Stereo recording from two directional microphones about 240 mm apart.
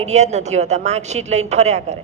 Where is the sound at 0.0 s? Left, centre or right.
Right.